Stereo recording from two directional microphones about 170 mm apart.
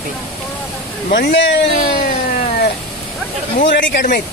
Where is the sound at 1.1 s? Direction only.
75° left (ahead or behind).